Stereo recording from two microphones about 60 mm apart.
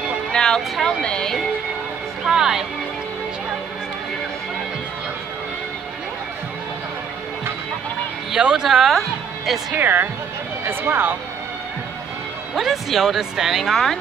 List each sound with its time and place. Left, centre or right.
0.3 s speech: centre
2.2 s music: centre
8.3 s speech: centre
9.8 s speech: right
12.5 s speech: centre